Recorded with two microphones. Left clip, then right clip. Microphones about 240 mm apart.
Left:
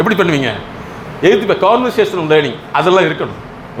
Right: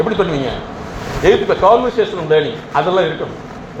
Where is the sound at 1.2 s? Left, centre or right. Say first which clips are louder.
Even; left.